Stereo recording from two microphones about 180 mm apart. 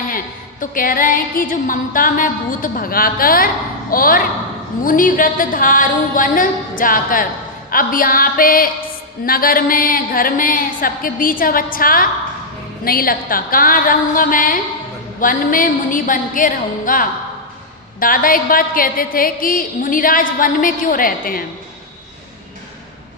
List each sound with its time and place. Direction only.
0.6 s a woman's voice: 50° left (ahead or behind)